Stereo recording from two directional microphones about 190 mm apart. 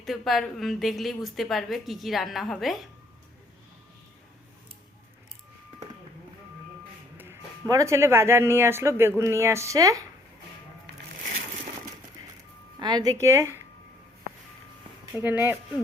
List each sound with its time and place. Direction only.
0.0 s a woman's voice: centre (ahead or behind)
7.2 s speech: 15° right (ahead or behind)
12.8 s speech: 20° right (ahead or behind)
15.1 s speech: 10° right (ahead or behind)